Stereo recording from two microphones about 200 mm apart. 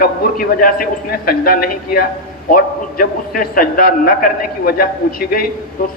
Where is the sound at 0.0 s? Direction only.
45° left (ahead or behind).